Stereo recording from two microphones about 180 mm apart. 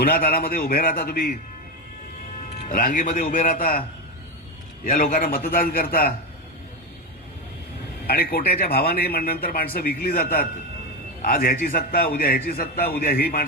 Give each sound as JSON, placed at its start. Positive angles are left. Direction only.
{"t": 0.0, "sound": "a man's voice", "side_deg": 55}
{"t": 2.6, "sound": "a man's voice", "side_deg": 50}
{"t": 8.0, "sound": "speech", "side_deg": 60}